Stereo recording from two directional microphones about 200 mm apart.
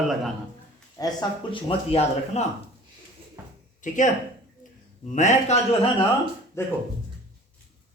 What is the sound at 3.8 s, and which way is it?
Speech, 40° left (ahead or behind).